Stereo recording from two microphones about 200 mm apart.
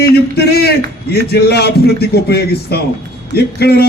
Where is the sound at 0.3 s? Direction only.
55° left (ahead or behind).